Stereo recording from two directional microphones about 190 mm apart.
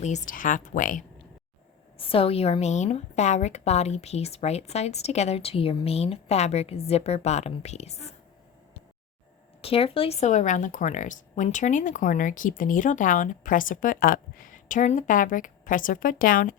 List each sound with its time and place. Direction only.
0.0 s speech: 40° left (ahead or behind)
2.0 s a woman's voice: 30° left (ahead or behind)
9.6 s speech: 30° left (ahead or behind); by 16.6 s 45° left (ahead or behind)